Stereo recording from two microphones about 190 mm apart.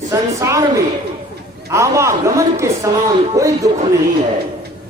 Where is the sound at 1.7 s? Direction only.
15° right (ahead or behind).